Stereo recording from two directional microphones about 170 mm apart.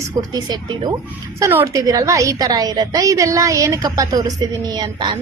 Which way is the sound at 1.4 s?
15° right (ahead or behind).